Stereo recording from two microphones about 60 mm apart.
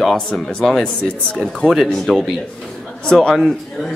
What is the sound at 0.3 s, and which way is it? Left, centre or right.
A man's voice, centre.